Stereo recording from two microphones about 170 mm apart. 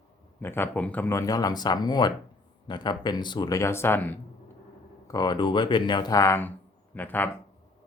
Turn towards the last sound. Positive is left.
turn(degrees=10)  # may be behind; listen again after turning